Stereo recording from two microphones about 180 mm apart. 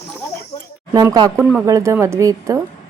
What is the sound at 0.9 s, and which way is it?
Speech, 20° right (ahead or behind).